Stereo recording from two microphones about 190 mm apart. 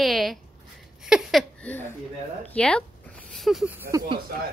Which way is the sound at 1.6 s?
10° left (ahead or behind).